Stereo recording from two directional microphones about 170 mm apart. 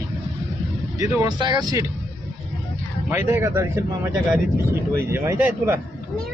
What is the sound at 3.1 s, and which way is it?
Speech, 15° right (ahead or behind).